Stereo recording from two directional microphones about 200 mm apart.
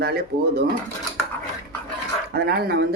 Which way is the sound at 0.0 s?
50° right (ahead or behind).